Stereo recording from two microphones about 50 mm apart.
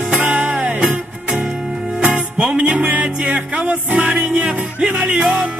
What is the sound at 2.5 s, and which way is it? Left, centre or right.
Music, right.